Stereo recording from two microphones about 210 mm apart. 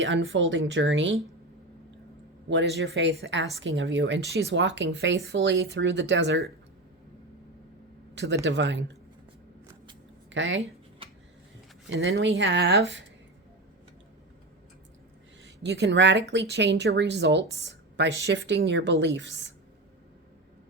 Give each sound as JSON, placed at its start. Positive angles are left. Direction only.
{"t": 0.0, "sound": "speech", "side_deg": -70}
{"t": 2.5, "sound": "speech", "side_deg": -55}
{"t": 8.1, "sound": "speech", "side_deg": -55}
{"t": 10.3, "sound": "speech", "side_deg": -60}
{"t": 11.9, "sound": "speech", "side_deg": -55}
{"t": 15.6, "sound": "speech", "side_deg": -55}